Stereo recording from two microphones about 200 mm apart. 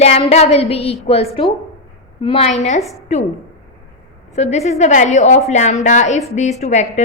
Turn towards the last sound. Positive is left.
turn(degrees=35)  # may be behind; listen again after turning